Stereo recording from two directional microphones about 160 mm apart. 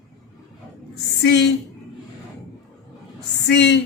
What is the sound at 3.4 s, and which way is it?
Speech, 90° left.